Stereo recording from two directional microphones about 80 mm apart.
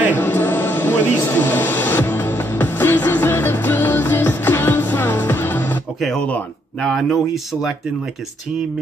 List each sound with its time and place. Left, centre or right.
0.1 s a sound: left
5.9 s speech: centre
6.2 s speech: centre